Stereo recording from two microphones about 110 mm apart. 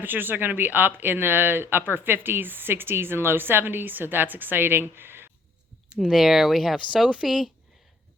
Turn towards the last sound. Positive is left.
turn(degrees=-5)  # may be behind; listen again after turning